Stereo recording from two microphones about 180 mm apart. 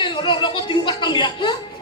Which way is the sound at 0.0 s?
25° left (ahead or behind).